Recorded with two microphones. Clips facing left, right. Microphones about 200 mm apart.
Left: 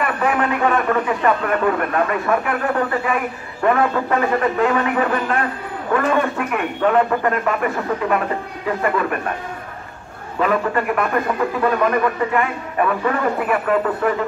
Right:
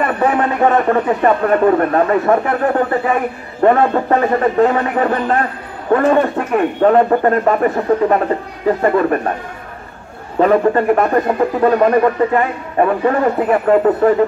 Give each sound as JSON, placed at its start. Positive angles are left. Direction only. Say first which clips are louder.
{"t": 0.0, "sound": "speech", "louder": "right 4 dB", "side_deg": -35}
{"t": 10.4, "sound": "speech", "louder": "right 7 dB", "side_deg": -35}